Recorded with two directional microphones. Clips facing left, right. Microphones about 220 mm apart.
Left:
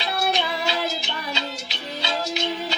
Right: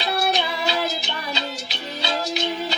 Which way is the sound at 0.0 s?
35° right (ahead or behind).